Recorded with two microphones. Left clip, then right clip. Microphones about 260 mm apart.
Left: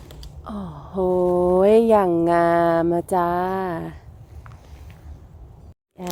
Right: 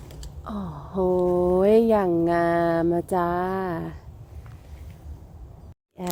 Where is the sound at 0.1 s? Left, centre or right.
Centre.